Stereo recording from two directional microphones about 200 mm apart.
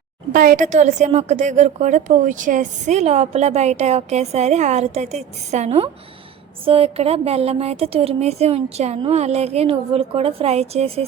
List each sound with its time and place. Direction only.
0.3 s a woman's voice: 40° right (ahead or behind)